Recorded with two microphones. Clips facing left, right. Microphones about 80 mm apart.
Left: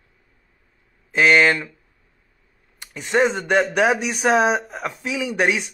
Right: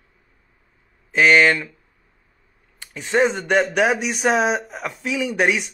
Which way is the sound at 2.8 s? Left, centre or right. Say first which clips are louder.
Even; left.